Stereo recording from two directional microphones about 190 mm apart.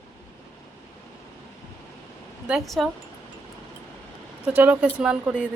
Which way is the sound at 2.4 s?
Centre (ahead or behind).